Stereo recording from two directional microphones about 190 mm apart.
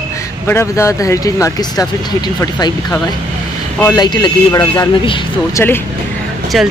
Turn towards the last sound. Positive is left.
turn(degrees=0)  # may be behind; listen again after turning